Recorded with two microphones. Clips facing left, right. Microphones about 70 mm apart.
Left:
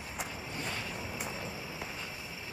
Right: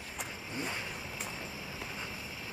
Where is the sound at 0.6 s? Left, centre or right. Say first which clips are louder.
Right 2 dB; centre.